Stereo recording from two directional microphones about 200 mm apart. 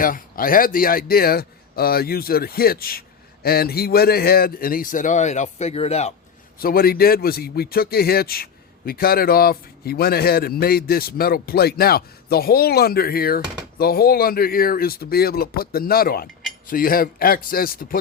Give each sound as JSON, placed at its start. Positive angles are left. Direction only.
{"t": 0.0, "sound": "a man's voice", "side_deg": 45}
{"t": 6.6, "sound": "a man's voice", "side_deg": 50}